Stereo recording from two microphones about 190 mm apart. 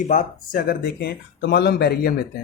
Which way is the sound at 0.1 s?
45° left (ahead or behind).